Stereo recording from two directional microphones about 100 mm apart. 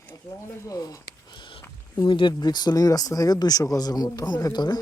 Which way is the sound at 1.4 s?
55° left (ahead or behind).